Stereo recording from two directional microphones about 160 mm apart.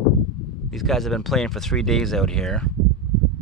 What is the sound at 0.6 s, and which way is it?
Speech, centre (ahead or behind).